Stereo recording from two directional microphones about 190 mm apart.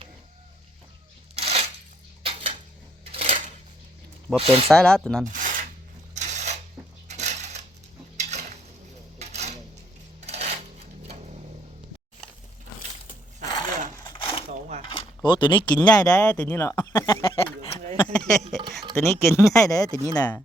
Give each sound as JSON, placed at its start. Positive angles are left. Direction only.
{"t": 1.4, "sound": "coin", "side_deg": -30}
{"t": 2.2, "sound": "dishes", "side_deg": -30}
{"t": 3.0, "sound": "a sound", "side_deg": -30}
{"t": 4.4, "sound": "speech", "side_deg": -30}
{"t": 4.7, "sound": "speech", "side_deg": 5}
{"t": 5.3, "sound": "filing", "side_deg": -45}
{"t": 6.1, "sound": "coin", "side_deg": -40}
{"t": 7.1, "sound": "a sound", "side_deg": -35}
{"t": 10.2, "sound": "coin", "side_deg": -35}
{"t": 13.4, "sound": "a sound", "side_deg": 20}
{"t": 14.9, "sound": "speech", "side_deg": 25}
{"t": 18.9, "sound": "speech", "side_deg": 15}